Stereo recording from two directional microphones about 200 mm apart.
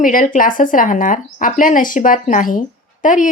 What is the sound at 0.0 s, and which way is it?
Speech, 40° left (ahead or behind).